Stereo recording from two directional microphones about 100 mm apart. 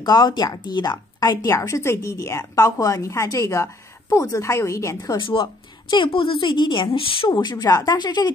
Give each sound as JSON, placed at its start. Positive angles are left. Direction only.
{"t": 0.0, "sound": "a woman's voice", "side_deg": 45}
{"t": 1.5, "sound": "a woman's voice", "side_deg": 30}
{"t": 5.1, "sound": "a woman's voice", "side_deg": 55}
{"t": 7.3, "sound": "a woman's voice", "side_deg": 40}